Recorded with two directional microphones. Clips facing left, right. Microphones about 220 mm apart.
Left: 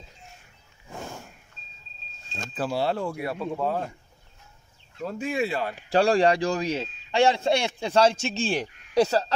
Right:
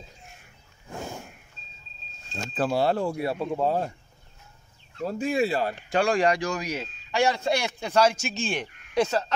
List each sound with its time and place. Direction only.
2.5 s speech: 50° right (ahead or behind); by 3.9 s 30° right (ahead or behind)
5.0 s speech: 40° right (ahead or behind)
5.9 s a man's voice: 35° left (ahead or behind)